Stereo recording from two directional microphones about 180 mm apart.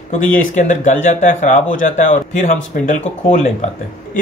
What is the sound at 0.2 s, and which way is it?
Speech, 45° left (ahead or behind).